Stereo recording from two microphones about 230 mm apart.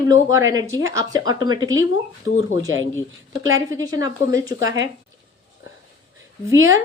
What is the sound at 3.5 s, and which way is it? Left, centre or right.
A woman's voice, centre.